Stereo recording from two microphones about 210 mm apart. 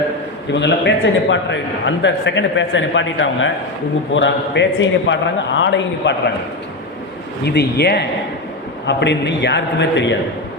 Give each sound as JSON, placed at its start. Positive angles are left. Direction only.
{"t": 0.5, "sound": "a man's voice", "side_deg": 55}
{"t": 7.4, "sound": "a man's voice", "side_deg": 50}